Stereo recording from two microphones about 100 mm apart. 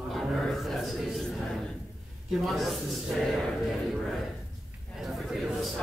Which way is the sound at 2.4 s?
Centre (ahead or behind).